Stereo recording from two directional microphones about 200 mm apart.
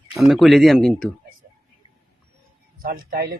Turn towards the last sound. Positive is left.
turn(degrees=-45)  # may be behind; listen again after turning